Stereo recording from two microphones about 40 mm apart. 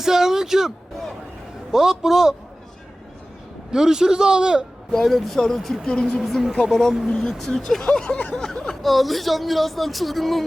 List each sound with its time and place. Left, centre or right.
0.0 s speech: centre
1.7 s a man's voice: centre
3.7 s a man's voice: centre
5.0 s speech: centre
5.8 s a woman's voice: left
6.1 s speech: centre
7.9 s a woman's voice: left
8.8 s speech: centre